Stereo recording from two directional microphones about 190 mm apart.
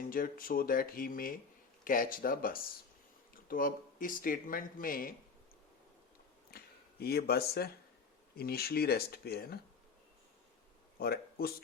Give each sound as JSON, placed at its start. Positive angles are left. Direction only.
{"t": 0.1, "sound": "speech", "side_deg": 50}
{"t": 6.5, "sound": "a sound", "side_deg": 55}
{"t": 7.0, "sound": "a man's voice", "side_deg": 55}
{"t": 11.0, "sound": "speech", "side_deg": 55}